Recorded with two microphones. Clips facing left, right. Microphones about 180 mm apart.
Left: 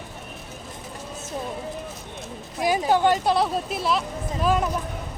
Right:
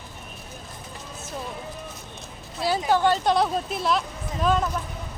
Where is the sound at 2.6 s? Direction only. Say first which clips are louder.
Left 2 dB; 15° left (ahead or behind).